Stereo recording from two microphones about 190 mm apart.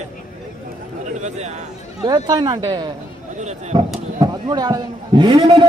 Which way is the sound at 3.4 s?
35° right (ahead or behind).